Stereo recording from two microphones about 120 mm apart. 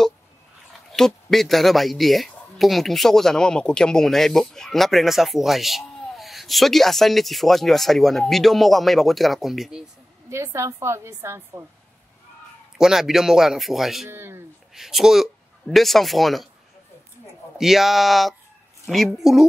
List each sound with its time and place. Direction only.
0.9 s speech: 5° left (ahead or behind)
10.3 s a woman's voice: 25° right (ahead or behind)
12.7 s speech: 5° right (ahead or behind)
14.0 s a woman's voice: 20° right (ahead or behind)
14.7 s speech: 5° right (ahead or behind)
17.6 s speech: centre (ahead or behind)